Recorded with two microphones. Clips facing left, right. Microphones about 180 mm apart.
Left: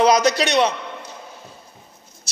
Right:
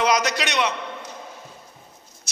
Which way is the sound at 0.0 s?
30° left (ahead or behind).